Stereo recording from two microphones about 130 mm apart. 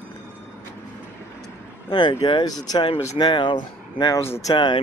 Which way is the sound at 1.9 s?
40° left (ahead or behind).